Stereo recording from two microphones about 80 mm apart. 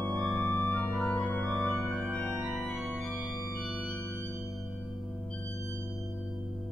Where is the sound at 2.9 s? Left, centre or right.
Centre.